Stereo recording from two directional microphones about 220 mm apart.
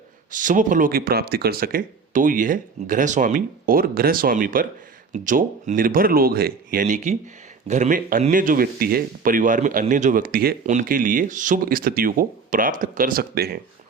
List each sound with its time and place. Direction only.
0.3 s speech: 35° right (ahead or behind)